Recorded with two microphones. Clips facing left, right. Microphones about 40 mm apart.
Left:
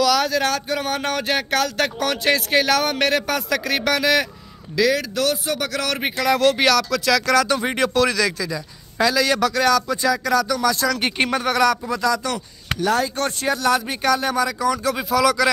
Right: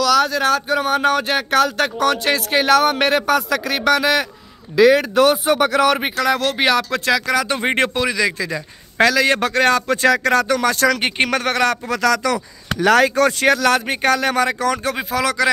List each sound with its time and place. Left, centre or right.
0.0 s speech: centre
4.7 s speech: right
6.1 s speech: centre
6.6 s speech: right
7.4 s speech: right
7.9 s speech: right
8.4 s a man's voice: right
11.2 s speech: right
11.5 s speech: right
11.9 s speech: right
12.8 s speech: right
13.7 s speech: right
15.0 s speech: right